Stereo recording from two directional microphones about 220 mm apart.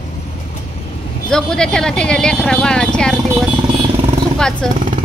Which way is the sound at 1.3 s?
5° left (ahead or behind).